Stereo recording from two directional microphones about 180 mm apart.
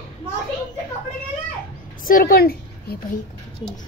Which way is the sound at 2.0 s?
50° left (ahead or behind).